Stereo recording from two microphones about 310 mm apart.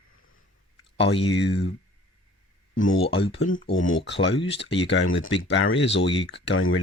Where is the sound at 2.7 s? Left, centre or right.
Left.